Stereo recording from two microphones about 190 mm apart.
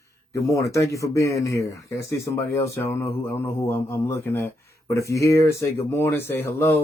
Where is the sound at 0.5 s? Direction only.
15° left (ahead or behind).